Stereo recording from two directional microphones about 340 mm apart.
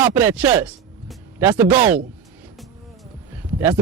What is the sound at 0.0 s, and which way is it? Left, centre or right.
Speech, centre.